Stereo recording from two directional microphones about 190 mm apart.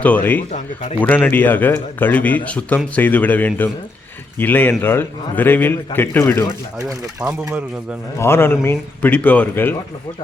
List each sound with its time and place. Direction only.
0.0 s speech: 10° left (ahead or behind)
0.5 s speech: 35° left (ahead or behind)
1.0 s speech: 10° left (ahead or behind)
8.2 s speech: 10° left (ahead or behind)